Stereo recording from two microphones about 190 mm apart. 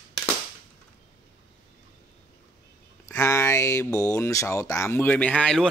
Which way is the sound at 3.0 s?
15° left (ahead or behind).